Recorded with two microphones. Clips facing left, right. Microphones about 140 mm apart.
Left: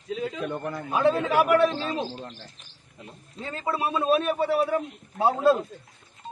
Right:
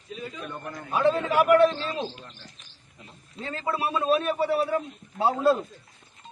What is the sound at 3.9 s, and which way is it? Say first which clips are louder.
A man's voice: left 1 dB; 15° left (ahead or behind).